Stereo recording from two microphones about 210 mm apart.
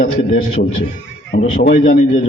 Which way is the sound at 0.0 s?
40° left (ahead or behind).